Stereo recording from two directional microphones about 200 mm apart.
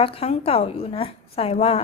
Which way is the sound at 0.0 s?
30° left (ahead or behind).